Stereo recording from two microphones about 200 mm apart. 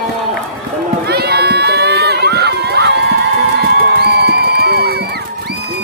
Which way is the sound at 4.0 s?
55° right (ahead or behind).